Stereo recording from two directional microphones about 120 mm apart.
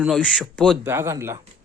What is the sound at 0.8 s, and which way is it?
Speech, 20° right (ahead or behind).